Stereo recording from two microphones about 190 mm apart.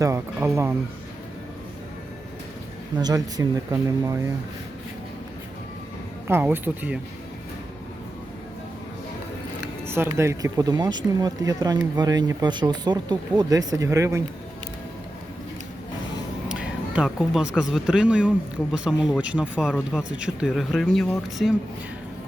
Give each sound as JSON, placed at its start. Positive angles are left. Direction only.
{"t": 0.0, "sound": "speech", "side_deg": -15}
{"t": 3.0, "sound": "speech", "side_deg": -20}
{"t": 6.2, "sound": "speech", "side_deg": -10}
{"t": 9.8, "sound": "speech", "side_deg": -15}
{"t": 16.6, "sound": "speech", "side_deg": -5}